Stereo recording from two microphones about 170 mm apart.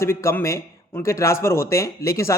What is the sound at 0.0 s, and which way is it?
Speech, 15° left (ahead or behind).